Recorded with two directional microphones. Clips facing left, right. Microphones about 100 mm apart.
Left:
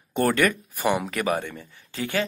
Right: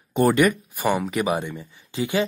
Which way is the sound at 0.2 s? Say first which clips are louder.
Right 3 dB; 15° right (ahead or behind).